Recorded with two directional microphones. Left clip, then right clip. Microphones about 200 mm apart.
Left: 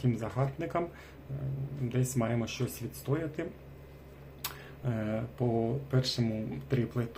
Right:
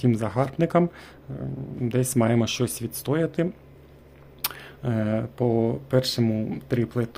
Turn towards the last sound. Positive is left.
turn(degrees=-50)  # may be behind; listen again after turning